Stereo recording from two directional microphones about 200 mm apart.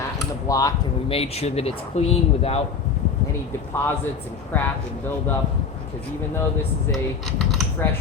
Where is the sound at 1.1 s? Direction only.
30° left (ahead or behind).